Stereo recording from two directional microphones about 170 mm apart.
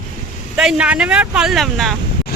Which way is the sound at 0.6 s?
5° right (ahead or behind).